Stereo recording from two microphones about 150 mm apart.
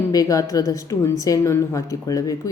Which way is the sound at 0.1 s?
20° left (ahead or behind).